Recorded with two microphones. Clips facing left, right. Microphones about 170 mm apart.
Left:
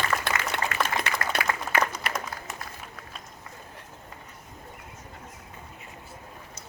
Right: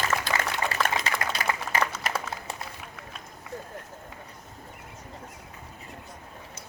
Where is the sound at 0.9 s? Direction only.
60° left (ahead or behind).